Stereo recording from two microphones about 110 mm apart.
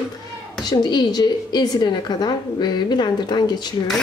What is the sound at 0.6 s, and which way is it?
A woman's voice, 40° left (ahead or behind).